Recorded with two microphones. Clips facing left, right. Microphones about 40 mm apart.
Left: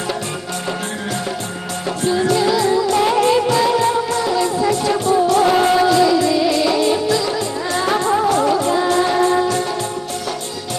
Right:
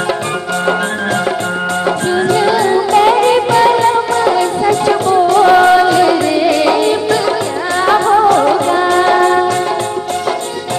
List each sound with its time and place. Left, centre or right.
1.9 s music: right